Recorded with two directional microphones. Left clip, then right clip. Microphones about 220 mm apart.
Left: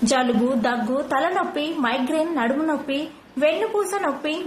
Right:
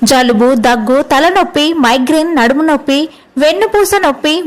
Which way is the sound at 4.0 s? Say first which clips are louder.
Right 13 dB; 45° right (ahead or behind).